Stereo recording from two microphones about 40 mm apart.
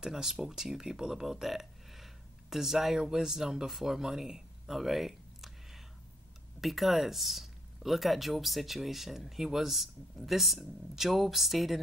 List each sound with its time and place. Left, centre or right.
0.0 s speech: centre